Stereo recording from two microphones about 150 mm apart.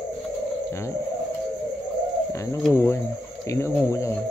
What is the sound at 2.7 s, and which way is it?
Speech, 15° left (ahead or behind).